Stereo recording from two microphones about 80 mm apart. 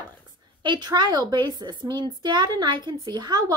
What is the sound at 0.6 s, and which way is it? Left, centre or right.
A woman's voice, right.